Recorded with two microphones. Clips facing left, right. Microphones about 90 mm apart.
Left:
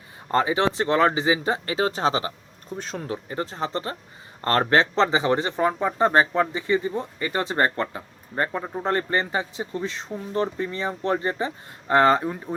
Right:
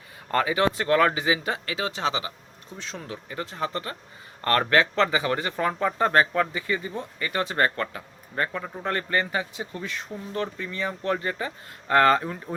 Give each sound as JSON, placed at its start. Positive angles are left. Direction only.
{"t": 0.3, "sound": "speech", "side_deg": 25}